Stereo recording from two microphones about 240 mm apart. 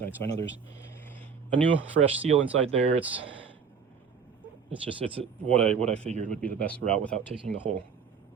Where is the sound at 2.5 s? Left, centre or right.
Right.